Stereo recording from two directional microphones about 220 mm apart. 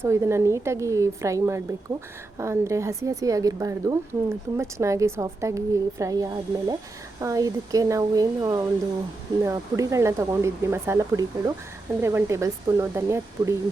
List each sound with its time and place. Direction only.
0.0 s a woman's voice: 10° right (ahead or behind)